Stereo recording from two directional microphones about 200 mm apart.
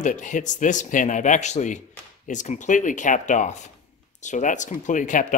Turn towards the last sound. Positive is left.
turn(degrees=40)  # may be behind; listen again after turning